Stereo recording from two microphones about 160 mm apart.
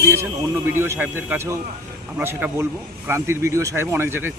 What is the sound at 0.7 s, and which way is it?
Speech, 15° right (ahead or behind).